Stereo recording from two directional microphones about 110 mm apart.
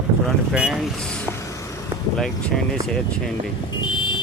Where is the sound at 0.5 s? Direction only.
5° right (ahead or behind).